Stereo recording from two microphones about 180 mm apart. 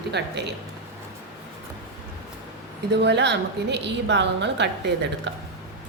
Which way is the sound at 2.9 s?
70° right (ahead or behind).